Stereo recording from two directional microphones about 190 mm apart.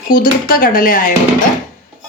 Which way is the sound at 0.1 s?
50° left (ahead or behind).